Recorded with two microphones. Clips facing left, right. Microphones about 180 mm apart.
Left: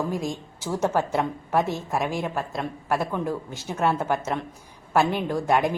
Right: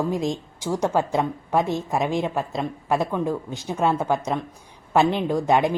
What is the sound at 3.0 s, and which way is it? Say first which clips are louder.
A woman's voice: right 3 dB; 15° right (ahead or behind).